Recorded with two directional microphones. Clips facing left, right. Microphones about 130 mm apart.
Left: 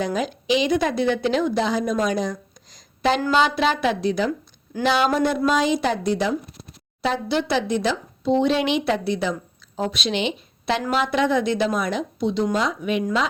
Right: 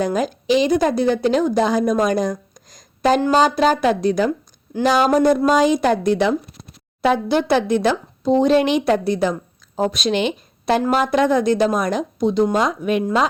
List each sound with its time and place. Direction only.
0.0 s a woman's voice: 45° right (ahead or behind)